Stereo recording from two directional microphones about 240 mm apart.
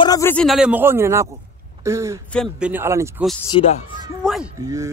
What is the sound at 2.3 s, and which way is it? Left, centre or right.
Speech, centre.